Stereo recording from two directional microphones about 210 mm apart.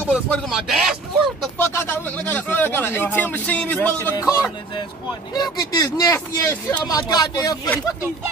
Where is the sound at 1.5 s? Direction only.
10° left (ahead or behind).